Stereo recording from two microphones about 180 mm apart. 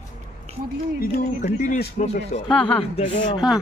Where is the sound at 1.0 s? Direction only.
45° left (ahead or behind).